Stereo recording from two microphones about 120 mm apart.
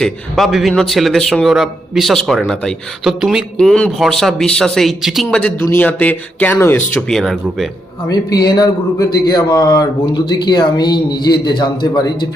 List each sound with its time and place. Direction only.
0.0 s speech: centre (ahead or behind)
5.5 s speech: 20° left (ahead or behind)
7.1 s speech: centre (ahead or behind)
8.1 s a man's voice: 35° left (ahead or behind)